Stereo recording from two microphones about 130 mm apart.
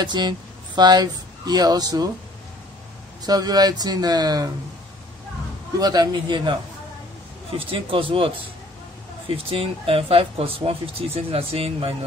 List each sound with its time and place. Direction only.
0.0 s speech: 35° right (ahead or behind)
3.3 s speech: 30° right (ahead or behind)
5.8 s speech: 30° right (ahead or behind)
7.5 s speech: 45° right (ahead or behind)
9.5 s speech: 45° right (ahead or behind)